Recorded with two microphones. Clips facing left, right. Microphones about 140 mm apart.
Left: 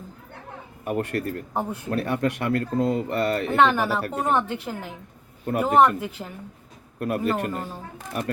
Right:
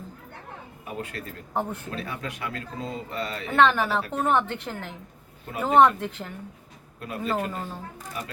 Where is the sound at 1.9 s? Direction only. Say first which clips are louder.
Left 10 dB; 65° left (ahead or behind).